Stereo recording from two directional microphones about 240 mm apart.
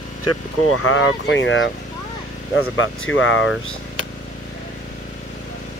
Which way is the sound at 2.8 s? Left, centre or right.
Left.